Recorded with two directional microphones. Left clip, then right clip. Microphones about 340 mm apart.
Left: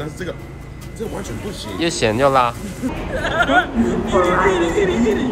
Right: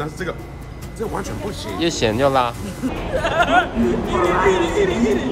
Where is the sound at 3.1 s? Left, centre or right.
Right.